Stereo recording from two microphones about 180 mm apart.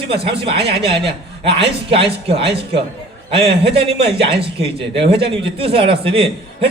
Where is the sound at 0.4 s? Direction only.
30° right (ahead or behind).